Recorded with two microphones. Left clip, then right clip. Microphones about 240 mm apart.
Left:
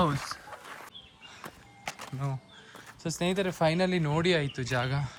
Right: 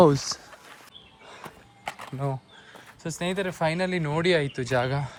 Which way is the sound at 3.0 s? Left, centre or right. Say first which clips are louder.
Right 1 dB; centre.